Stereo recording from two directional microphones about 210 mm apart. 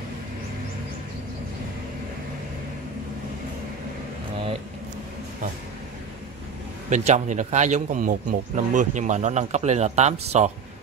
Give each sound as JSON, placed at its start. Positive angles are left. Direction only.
{"t": 6.9, "sound": "speech", "side_deg": -35}